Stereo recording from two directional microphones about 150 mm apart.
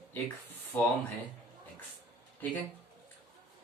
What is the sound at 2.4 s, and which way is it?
Speech, 10° left (ahead or behind).